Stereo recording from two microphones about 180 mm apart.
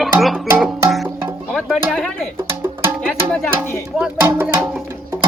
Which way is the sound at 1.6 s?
Centre (ahead or behind).